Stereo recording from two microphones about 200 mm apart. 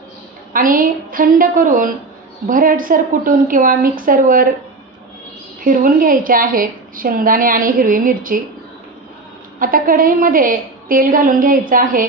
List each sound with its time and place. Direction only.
0.5 s a woman's voice: 45° right (ahead or behind)
5.6 s a woman's voice: 40° right (ahead or behind)
9.6 s a woman's voice: 45° right (ahead or behind)